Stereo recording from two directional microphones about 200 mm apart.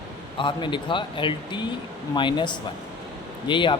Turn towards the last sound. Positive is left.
turn(degrees=25)  # may be behind; listen again after turning